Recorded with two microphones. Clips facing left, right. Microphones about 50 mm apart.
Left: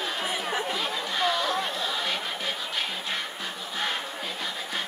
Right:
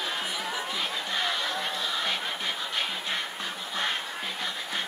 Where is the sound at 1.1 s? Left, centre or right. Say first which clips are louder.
Left 4 dB; centre.